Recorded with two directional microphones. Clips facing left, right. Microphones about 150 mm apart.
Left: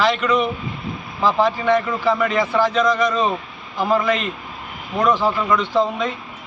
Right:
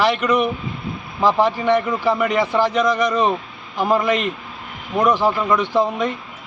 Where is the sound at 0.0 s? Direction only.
15° right (ahead or behind).